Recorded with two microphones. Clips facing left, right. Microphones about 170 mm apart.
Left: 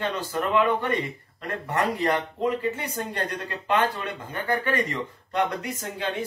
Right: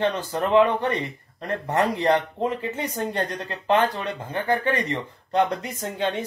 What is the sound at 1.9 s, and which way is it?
Speech, 20° right (ahead or behind).